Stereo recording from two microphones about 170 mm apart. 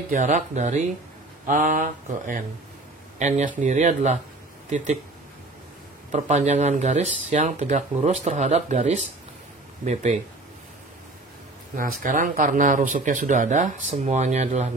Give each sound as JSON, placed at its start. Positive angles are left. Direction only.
{"t": 0.1, "sound": "speech", "side_deg": -45}
{"t": 6.1, "sound": "speech", "side_deg": -40}
{"t": 12.0, "sound": "speech", "side_deg": -55}